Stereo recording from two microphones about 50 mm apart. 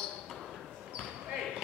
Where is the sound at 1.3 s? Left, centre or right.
Centre.